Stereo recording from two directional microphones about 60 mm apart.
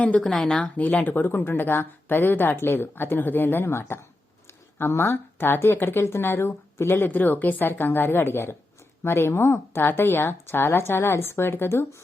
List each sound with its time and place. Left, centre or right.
0.2 s speech: centre
0.5 s speech: left
7.1 s speech: left